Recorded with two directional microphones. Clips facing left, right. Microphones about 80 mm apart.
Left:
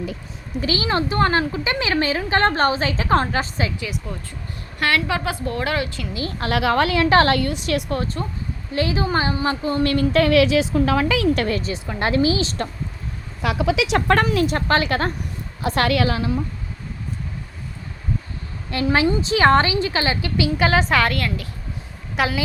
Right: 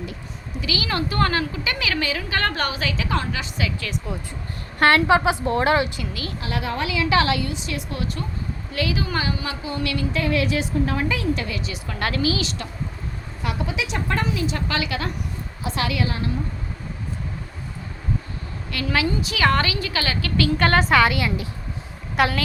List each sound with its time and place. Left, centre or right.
0.6 s a woman's voice: left
4.1 s a woman's voice: centre
4.8 s a woman's voice: right
6.4 s speech: left
6.8 s a woman's voice: left
7.9 s a woman's voice: left
10.1 s a woman's voice: left
11.4 s a woman's voice: left
11.7 s a woman's voice: left
13.4 s speech: left
14.5 s a woman's voice: left
15.6 s a woman's voice: left
18.7 s a woman's voice: left
20.6 s a woman's voice: centre